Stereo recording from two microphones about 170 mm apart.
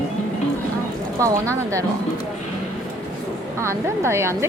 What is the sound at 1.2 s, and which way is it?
Speech, 20° right (ahead or behind).